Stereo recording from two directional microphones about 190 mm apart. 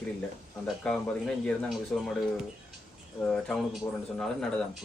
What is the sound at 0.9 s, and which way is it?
Speech, 5° left (ahead or behind).